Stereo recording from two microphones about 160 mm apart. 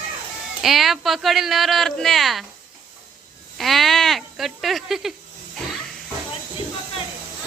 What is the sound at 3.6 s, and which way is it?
Speech, centre (ahead or behind).